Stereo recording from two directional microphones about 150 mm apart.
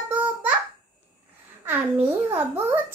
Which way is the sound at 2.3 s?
15° right (ahead or behind).